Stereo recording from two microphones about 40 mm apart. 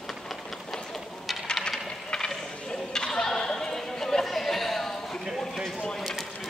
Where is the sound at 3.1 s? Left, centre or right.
Centre.